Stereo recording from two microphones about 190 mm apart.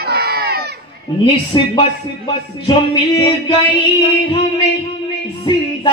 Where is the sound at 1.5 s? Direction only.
25° left (ahead or behind).